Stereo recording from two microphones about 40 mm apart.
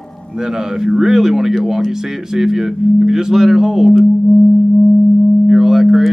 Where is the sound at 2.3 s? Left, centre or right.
Centre.